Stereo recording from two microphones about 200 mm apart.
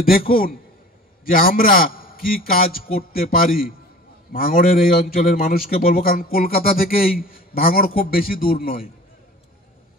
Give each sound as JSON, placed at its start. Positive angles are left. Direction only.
{"t": 0.1, "sound": "a man's voice", "side_deg": 45}